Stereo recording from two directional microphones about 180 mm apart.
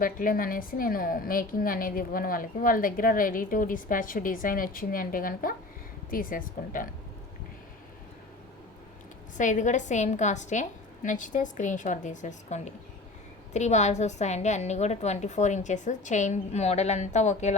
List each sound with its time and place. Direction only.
0.0 s a woman's voice: 50° left (ahead or behind)
9.4 s a woman's voice: 45° left (ahead or behind)